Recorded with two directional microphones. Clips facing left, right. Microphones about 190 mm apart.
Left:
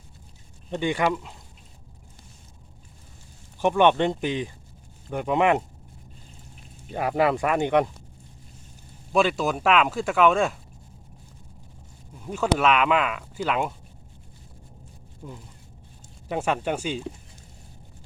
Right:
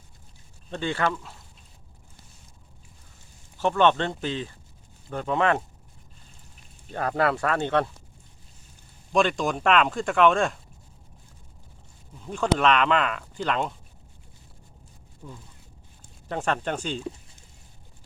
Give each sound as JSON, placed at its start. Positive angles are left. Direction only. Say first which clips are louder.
{"t": 0.7, "sound": "speech", "louder": "left 3 dB", "side_deg": 15}
{"t": 3.6, "sound": "speech", "louder": "left 2 dB", "side_deg": 15}
{"t": 6.9, "sound": "speech", "louder": "left 2 dB", "side_deg": 15}
{"t": 9.1, "sound": "speech", "louder": "left 1 dB", "side_deg": 5}
{"t": 12.2, "sound": "speech", "louder": "even", "side_deg": 5}
{"t": 15.2, "sound": "speech", "louder": "left 3 dB", "side_deg": 15}